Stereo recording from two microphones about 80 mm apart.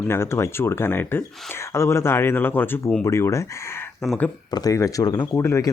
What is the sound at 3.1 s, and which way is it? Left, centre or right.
Speech, left.